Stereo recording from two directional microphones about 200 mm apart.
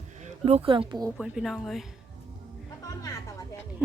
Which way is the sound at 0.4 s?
30° right (ahead or behind).